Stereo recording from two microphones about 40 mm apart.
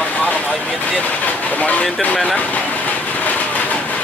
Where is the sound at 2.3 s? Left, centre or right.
Left.